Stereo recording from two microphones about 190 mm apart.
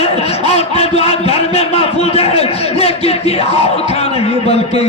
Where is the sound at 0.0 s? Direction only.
35° left (ahead or behind).